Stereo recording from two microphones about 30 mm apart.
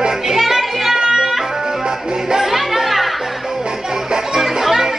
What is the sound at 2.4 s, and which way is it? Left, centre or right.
Music, centre.